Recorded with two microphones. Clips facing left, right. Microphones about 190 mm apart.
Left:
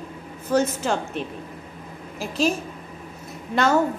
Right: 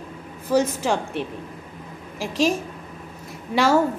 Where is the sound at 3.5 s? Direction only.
10° right (ahead or behind).